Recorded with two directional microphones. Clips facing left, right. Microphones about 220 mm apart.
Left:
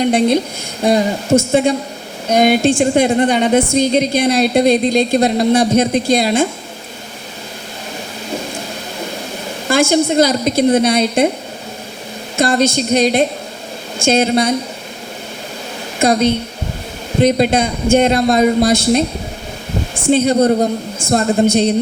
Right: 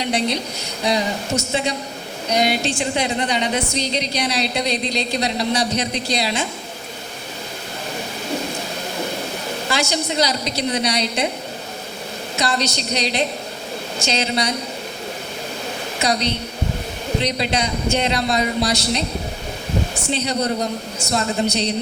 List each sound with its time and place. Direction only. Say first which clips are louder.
0.0 s a woman's voice: left 9 dB; 50° left (ahead or behind)
9.6 s a woman's voice: left 11 dB; 50° left (ahead or behind)
12.4 s a woman's voice: left 9 dB; 50° left (ahead or behind)
16.0 s a woman's voice: left 9 dB; 50° left (ahead or behind)
20.1 s a woman's voice: left 12 dB; 50° left (ahead or behind)